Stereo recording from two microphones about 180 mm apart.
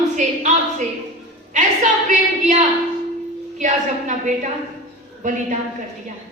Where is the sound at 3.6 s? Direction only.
45° right (ahead or behind).